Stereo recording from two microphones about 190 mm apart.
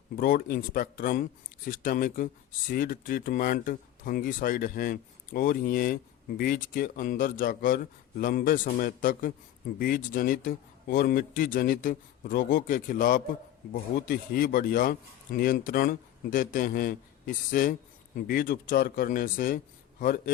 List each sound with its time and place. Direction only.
0.2 s speech: 50° left (ahead or behind)